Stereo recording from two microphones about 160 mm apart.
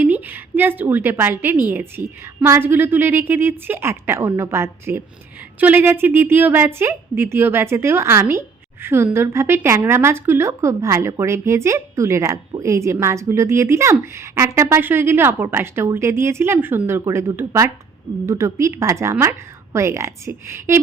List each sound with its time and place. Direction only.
0.0 s a woman's voice: 10° right (ahead or behind)